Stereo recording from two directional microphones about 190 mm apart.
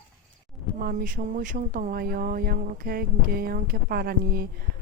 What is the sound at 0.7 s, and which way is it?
Speech, 50° right (ahead or behind).